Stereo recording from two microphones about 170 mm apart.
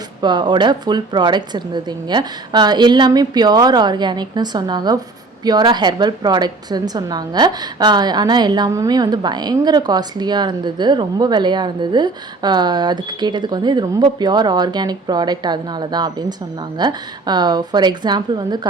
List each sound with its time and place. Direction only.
0.2 s a woman's voice: 25° right (ahead or behind)